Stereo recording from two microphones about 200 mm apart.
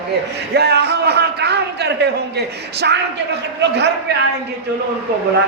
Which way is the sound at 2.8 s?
55° right (ahead or behind).